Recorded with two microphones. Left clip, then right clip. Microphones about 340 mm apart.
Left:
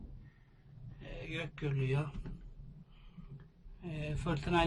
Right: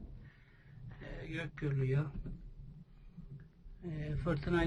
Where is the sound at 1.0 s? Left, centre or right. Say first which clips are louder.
Left 1 dB; centre.